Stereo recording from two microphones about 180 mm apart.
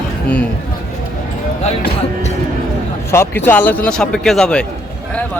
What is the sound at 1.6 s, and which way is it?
Speech, 40° left (ahead or behind).